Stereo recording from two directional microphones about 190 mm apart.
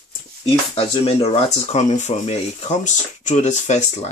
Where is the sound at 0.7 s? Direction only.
30° left (ahead or behind).